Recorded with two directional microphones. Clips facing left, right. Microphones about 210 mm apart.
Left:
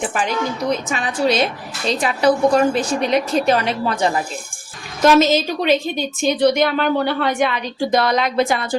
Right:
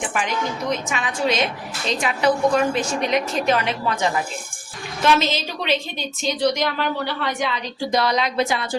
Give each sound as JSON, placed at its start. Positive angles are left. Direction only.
{"t": 0.7, "sound": "a woman's voice", "side_deg": 35}